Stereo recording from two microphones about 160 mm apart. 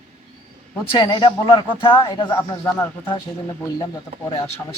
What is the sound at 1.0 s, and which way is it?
Speech, 30° left (ahead or behind).